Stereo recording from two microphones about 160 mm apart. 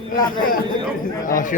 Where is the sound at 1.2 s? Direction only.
55° left (ahead or behind).